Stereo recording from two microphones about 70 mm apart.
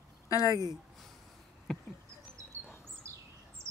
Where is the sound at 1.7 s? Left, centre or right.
Centre.